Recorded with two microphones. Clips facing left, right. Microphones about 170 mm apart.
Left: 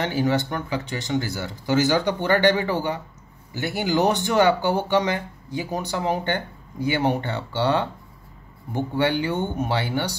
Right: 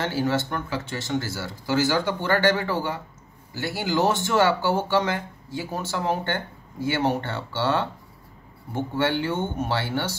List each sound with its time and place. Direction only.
0.0 s speech: 15° left (ahead or behind)